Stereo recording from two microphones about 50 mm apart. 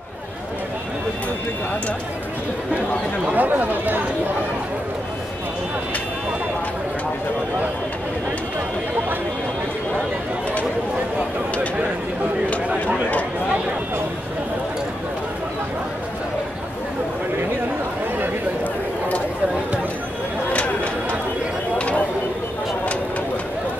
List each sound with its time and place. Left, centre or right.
3.3 s speech: right
20.5 s chatter: left
21.7 s a sound: left